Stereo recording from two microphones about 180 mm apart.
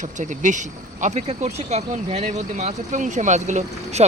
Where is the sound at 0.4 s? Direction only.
45° right (ahead or behind).